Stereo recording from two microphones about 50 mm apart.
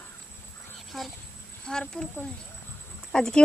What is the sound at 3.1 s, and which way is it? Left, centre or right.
Speech, centre.